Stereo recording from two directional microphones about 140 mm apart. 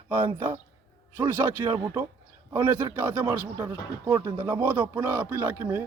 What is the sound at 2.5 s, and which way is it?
Speech, 15° right (ahead or behind).